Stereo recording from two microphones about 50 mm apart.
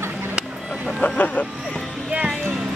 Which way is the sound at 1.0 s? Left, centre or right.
Left.